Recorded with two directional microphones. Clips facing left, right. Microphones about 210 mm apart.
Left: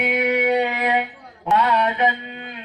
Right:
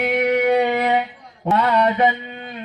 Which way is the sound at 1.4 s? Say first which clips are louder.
Right 2 dB; 40° right (ahead or behind).